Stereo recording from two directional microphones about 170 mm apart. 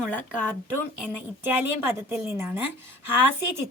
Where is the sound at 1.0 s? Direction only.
10° right (ahead or behind).